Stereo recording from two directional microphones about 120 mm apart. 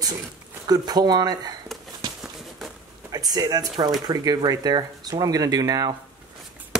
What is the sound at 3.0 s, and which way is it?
Speech, 30° right (ahead or behind).